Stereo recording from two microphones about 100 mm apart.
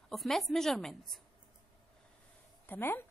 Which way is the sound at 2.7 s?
20° left (ahead or behind).